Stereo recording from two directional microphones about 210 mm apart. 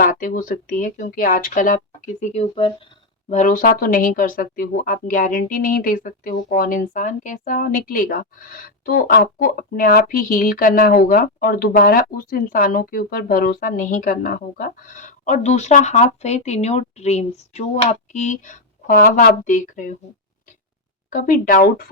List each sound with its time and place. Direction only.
0.0 s speech: 40° left (ahead or behind)
21.1 s speech: 40° left (ahead or behind)